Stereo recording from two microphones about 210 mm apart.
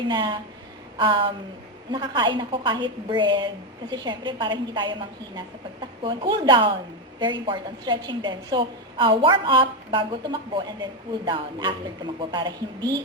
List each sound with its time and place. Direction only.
0.1 s a woman's voice: 20° right (ahead or behind)